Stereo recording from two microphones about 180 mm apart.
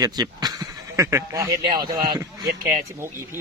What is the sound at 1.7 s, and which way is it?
Speech, 25° right (ahead or behind).